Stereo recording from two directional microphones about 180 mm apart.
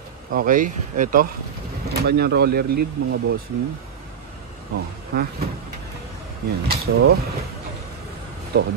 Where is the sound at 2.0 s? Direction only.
60° right (ahead or behind).